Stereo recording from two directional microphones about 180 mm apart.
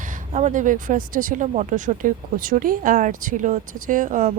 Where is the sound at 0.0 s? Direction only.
45° right (ahead or behind).